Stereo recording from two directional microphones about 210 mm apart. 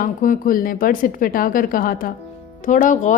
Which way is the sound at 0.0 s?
40° left (ahead or behind).